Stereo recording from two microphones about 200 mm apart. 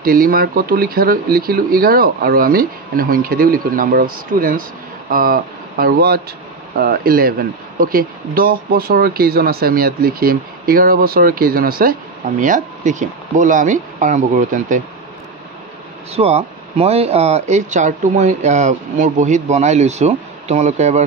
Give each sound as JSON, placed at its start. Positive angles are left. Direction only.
{"t": 0.0, "sound": "speech", "side_deg": -50}
{"t": 16.2, "sound": "speech", "side_deg": -30}